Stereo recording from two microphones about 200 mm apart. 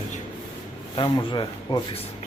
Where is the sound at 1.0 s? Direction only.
25° left (ahead or behind).